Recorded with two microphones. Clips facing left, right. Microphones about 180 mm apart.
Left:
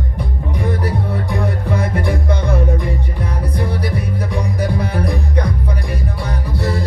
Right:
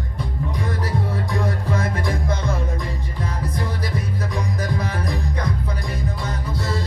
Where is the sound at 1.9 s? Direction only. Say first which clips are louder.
Left 5 dB; 65° left (ahead or behind).